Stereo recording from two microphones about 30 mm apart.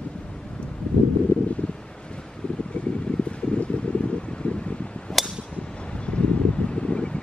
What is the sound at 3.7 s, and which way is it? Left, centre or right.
Wind, left.